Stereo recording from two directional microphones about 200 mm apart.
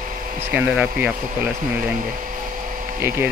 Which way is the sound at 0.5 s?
5° right (ahead or behind).